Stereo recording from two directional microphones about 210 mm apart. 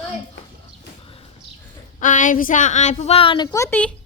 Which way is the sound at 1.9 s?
40° left (ahead or behind).